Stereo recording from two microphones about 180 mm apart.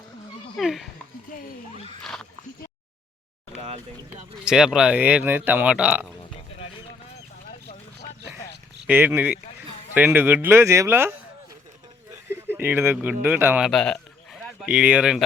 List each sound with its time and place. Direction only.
0.5 s speech: centre (ahead or behind)
3.5 s a sound: 35° right (ahead or behind)
4.4 s speech: 5° right (ahead or behind)
8.9 s speech: 10° right (ahead or behind)
12.3 s a sound: 10° right (ahead or behind)
13.2 s speech: 10° right (ahead or behind)
13.7 s speech: 5° left (ahead or behind)